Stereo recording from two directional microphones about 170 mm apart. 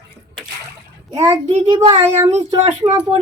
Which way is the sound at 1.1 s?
20° right (ahead or behind).